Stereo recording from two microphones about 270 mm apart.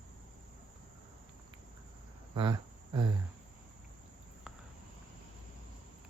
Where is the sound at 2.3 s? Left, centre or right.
Centre.